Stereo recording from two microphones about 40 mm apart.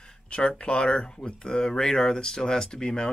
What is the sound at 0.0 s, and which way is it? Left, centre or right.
Speech, left.